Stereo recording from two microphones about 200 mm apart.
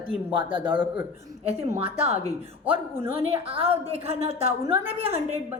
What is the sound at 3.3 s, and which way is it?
A woman's voice, 25° right (ahead or behind).